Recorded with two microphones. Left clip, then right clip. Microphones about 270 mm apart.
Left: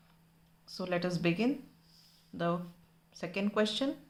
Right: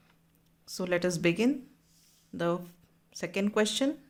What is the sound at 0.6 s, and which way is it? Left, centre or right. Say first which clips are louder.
Speech: right 5 dB; right.